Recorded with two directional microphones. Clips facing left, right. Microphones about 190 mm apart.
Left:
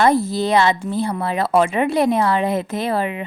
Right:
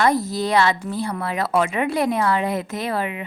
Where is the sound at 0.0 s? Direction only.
25° left (ahead or behind).